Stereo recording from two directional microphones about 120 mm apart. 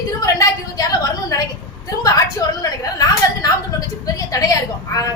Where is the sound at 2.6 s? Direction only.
30° left (ahead or behind).